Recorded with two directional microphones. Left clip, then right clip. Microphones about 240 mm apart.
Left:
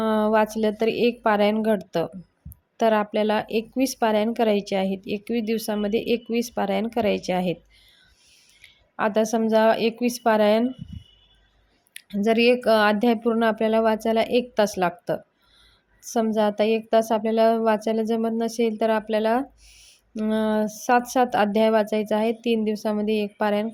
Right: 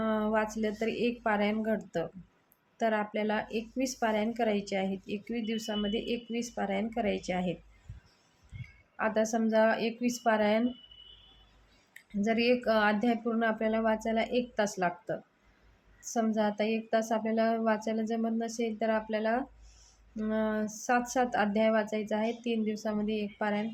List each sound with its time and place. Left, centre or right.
0.0 s a woman's voice: left
9.0 s a woman's voice: left
11.9 s a woman's voice: left